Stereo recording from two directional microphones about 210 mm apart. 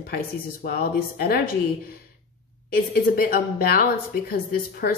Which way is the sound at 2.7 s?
45° left (ahead or behind).